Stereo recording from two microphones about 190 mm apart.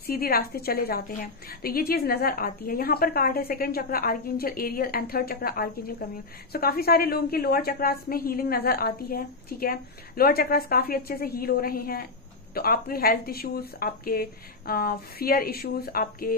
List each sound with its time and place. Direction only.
0.0 s a woman's voice: 55° left (ahead or behind)